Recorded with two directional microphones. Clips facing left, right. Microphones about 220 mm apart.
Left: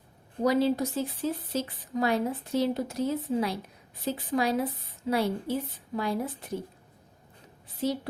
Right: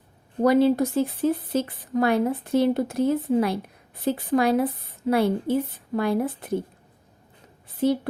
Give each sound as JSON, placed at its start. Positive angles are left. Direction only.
{"t": 0.4, "sound": "speech", "side_deg": -55}
{"t": 7.8, "sound": "speech", "side_deg": -55}